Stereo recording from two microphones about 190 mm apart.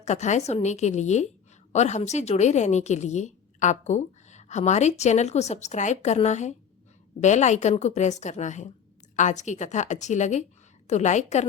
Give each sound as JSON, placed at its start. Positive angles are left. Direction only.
{"t": 0.0, "sound": "a woman's voice", "side_deg": 40}